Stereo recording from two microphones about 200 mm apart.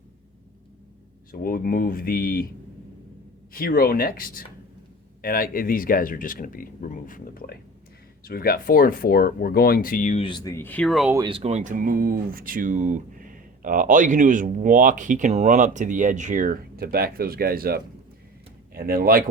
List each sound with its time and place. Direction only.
1.3 s speech: 45° left (ahead or behind)
3.5 s speech: 45° left (ahead or behind)
10.2 s speech: 20° left (ahead or behind); by 11.1 s centre (ahead or behind)
11.1 s speech: 25° right (ahead or behind); by 19.2 s 45° right (ahead or behind)